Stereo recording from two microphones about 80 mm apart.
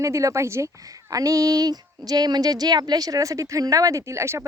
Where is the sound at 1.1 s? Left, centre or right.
Right.